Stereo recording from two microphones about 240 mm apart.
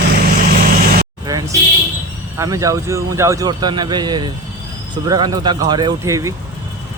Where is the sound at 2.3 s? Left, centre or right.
Centre.